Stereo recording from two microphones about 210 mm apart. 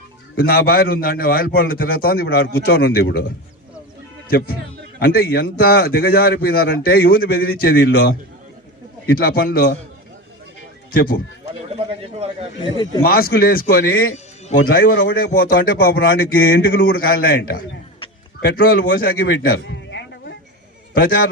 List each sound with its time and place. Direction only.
0.3 s a man's voice: 45° left (ahead or behind)
4.3 s a man's voice: 45° left (ahead or behind)
10.9 s a man's voice: 45° left (ahead or behind)
11.7 s speech: 30° right (ahead or behind)
13.0 s a man's voice: 45° left (ahead or behind)
19.5 s a sound: 60° left (ahead or behind)
20.9 s a man's voice: 45° left (ahead or behind)